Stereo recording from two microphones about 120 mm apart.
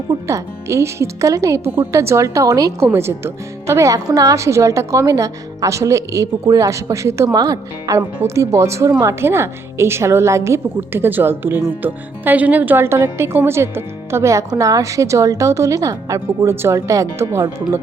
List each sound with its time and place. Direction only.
0.3 s speech: 25° right (ahead or behind)